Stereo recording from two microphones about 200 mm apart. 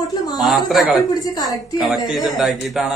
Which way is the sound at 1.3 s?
20° left (ahead or behind).